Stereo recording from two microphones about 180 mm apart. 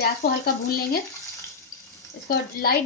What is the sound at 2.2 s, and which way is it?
Speech, 55° left (ahead or behind).